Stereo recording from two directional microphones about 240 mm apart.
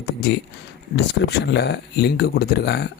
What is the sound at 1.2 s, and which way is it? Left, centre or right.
Speech, left.